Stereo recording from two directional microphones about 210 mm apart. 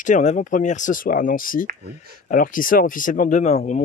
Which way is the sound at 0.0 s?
35° left (ahead or behind).